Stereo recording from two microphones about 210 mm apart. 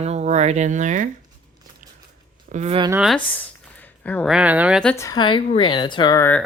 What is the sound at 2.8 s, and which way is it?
Speech, 10° right (ahead or behind).